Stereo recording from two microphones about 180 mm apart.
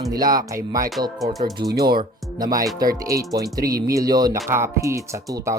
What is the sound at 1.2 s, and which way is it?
Speech, centre (ahead or behind).